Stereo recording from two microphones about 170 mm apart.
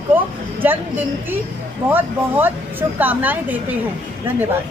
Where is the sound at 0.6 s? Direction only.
10° right (ahead or behind).